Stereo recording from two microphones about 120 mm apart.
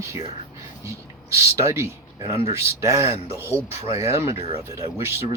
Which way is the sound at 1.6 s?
25° right (ahead or behind).